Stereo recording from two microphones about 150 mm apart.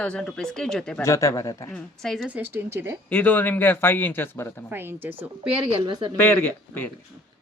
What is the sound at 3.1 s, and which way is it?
Speech, 10° left (ahead or behind).